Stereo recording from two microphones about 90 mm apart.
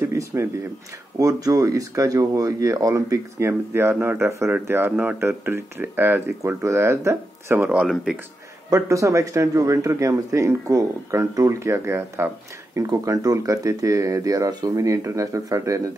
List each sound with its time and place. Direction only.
0.0 s a sound: 30° right (ahead or behind)
1.1 s speech: 40° right (ahead or behind); by 7.8 s 20° right (ahead or behind)
7.8 s speech: 5° right (ahead or behind)
8.6 s speech: 35° right (ahead or behind)
12.8 s speech: 40° right (ahead or behind)